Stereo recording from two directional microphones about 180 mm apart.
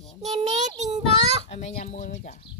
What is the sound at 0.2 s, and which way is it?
A child's voice, 35° right (ahead or behind).